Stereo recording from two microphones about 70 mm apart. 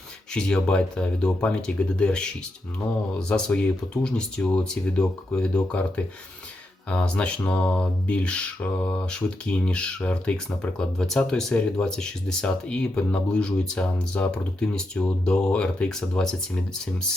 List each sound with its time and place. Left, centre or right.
0.3 s speech: centre
6.8 s speech: centre